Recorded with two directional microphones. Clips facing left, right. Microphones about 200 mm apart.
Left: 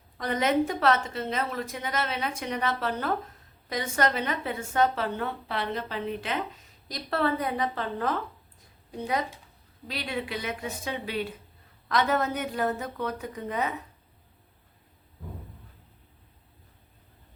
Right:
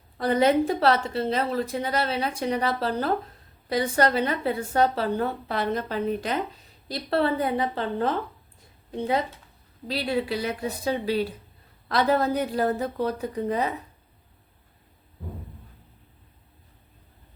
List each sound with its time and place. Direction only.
0.2 s a woman's voice: 35° right (ahead or behind)
6.8 s a woman's voice: 30° right (ahead or behind)
9.8 s a woman's voice: 35° right (ahead or behind)